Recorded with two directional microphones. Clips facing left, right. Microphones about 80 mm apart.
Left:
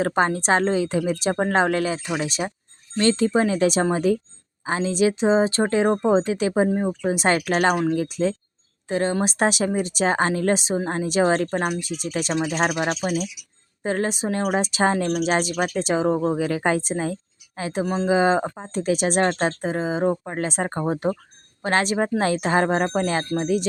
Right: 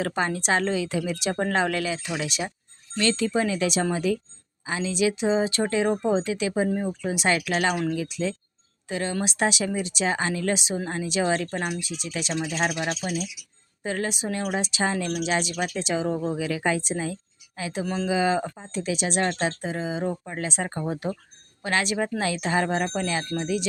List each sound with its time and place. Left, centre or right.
0.0 s speech: left